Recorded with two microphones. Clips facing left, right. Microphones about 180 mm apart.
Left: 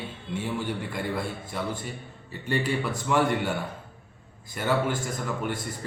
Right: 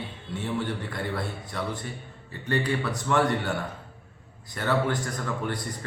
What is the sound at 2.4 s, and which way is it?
A man's voice, 10° left (ahead or behind).